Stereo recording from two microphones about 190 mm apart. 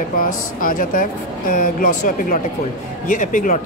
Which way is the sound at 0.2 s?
45° left (ahead or behind).